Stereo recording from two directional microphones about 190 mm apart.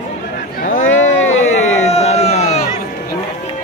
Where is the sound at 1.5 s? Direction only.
35° left (ahead or behind).